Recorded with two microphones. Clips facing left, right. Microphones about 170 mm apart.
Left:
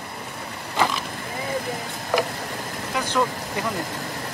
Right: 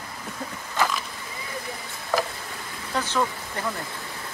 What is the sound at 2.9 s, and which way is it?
Speech, 15° left (ahead or behind).